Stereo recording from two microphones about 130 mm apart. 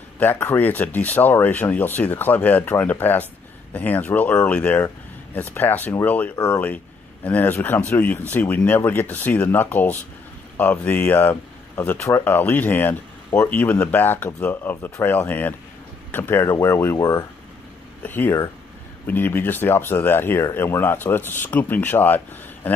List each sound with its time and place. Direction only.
0.2 s speech: 15° left (ahead or behind)